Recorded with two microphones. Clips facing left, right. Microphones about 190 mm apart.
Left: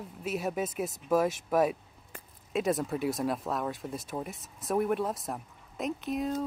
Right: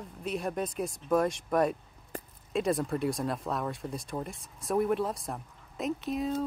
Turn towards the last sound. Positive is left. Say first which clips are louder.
# even
turn(degrees=0)  # may be behind; listen again after turning